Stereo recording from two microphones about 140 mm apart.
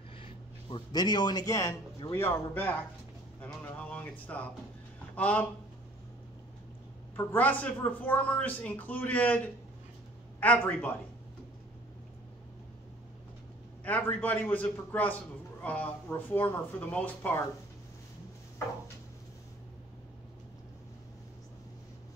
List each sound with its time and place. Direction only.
0.2 s a man's voice: 35° left (ahead or behind); by 5.5 s 10° left (ahead or behind)
7.2 s speech: 10° left (ahead or behind)
10.4 s speech: 10° left (ahead or behind)
13.8 s speech: 10° left (ahead or behind)